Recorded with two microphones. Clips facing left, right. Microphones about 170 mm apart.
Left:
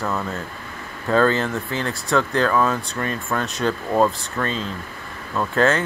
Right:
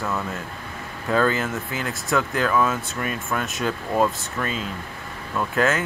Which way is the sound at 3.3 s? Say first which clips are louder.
Left 4 dB; 5° right (ahead or behind).